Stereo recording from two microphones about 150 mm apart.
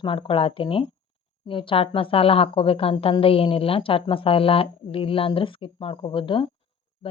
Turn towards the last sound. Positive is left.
turn(degrees=35)  # may be behind; listen again after turning